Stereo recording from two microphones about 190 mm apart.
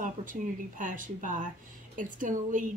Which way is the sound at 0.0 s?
45° right (ahead or behind).